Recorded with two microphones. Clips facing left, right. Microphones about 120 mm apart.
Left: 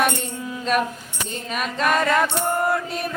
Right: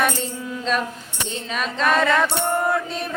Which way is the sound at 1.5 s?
10° left (ahead or behind).